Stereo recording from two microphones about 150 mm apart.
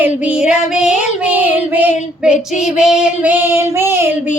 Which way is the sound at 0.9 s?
50° left (ahead or behind).